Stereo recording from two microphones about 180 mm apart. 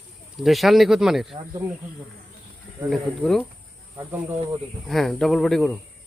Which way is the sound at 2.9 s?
5° left (ahead or behind).